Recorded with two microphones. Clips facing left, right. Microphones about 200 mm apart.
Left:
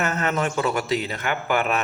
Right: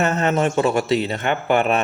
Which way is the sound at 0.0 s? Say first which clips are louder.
Right 5 dB; 25° right (ahead or behind).